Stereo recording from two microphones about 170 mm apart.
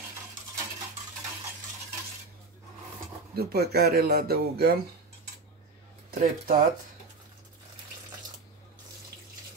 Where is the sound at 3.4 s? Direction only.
65° right (ahead or behind).